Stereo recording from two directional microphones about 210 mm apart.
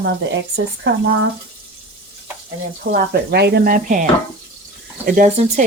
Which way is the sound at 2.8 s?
50° right (ahead or behind).